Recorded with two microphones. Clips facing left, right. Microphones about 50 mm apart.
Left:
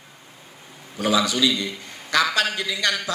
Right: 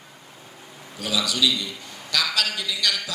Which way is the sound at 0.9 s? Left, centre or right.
Left.